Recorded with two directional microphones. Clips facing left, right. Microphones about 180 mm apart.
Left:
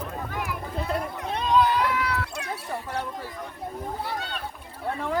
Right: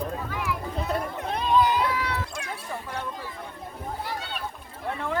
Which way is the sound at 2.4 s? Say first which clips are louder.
Left 2 dB; 35° left (ahead or behind).